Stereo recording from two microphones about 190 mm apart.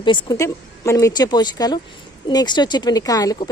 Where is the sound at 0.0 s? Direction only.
25° left (ahead or behind).